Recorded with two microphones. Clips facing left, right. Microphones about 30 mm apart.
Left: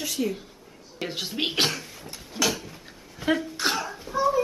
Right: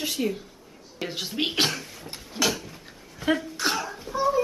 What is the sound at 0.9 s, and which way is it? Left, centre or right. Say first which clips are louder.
Speech: right 1 dB; centre.